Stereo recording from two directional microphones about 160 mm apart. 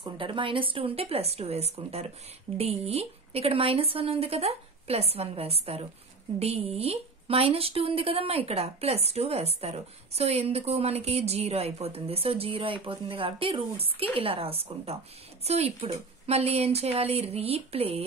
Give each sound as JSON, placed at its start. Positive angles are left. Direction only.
{"t": 0.2, "sound": "speech", "side_deg": -35}